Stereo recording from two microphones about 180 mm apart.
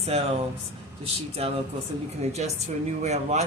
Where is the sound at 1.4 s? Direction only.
35° right (ahead or behind).